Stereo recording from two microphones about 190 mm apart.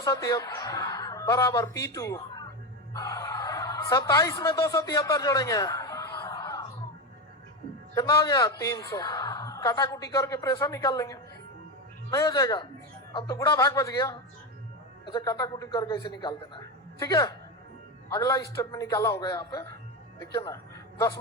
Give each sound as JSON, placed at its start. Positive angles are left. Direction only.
{"t": 0.0, "sound": "a woman's voice", "side_deg": 15}
{"t": 7.9, "sound": "a man's voice", "side_deg": 20}